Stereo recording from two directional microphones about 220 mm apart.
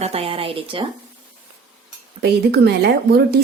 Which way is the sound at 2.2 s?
50° right (ahead or behind).